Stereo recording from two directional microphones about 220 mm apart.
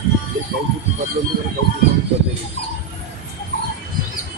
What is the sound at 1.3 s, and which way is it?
Music, 40° right (ahead or behind).